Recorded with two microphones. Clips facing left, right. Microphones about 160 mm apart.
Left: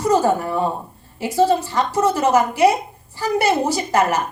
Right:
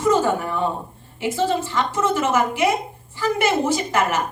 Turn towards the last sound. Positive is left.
turn(degrees=40)  # may be behind; listen again after turning